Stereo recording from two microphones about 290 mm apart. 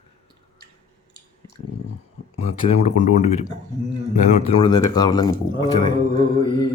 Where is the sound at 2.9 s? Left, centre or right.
Left.